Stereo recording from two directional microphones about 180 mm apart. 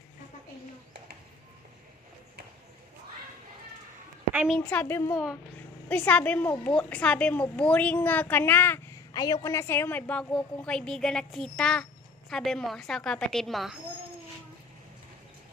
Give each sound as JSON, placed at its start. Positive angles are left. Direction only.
{"t": 4.3, "sound": "a woman's voice", "side_deg": -5}
{"t": 5.1, "sound": "a woman's voice", "side_deg": -5}
{"t": 5.9, "sound": "a woman's voice", "side_deg": 10}